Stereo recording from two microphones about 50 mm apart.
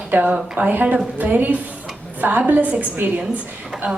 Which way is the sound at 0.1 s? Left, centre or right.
Right.